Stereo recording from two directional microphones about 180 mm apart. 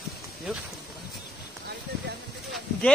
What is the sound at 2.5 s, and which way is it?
Sheep, 5° left (ahead or behind).